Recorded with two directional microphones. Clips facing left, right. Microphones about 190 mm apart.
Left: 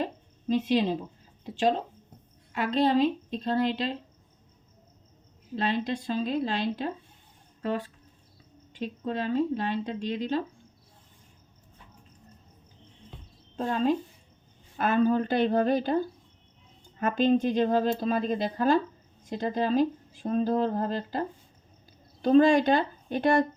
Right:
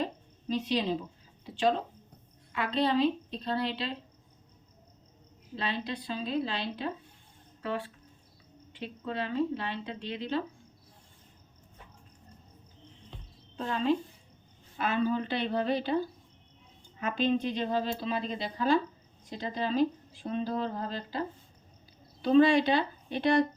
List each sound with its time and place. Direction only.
0.5 s a woman's voice: 50° left (ahead or behind)
2.5 s a woman's voice: 45° left (ahead or behind)
5.5 s a woman's voice: 45° left (ahead or behind)
13.6 s a woman's voice: 45° left (ahead or behind)
17.0 s a woman's voice: 50° left (ahead or behind)